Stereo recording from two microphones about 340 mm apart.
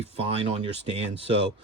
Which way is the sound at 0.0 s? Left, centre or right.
Centre.